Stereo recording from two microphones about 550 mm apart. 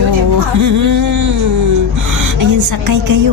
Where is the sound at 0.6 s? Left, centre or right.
Right.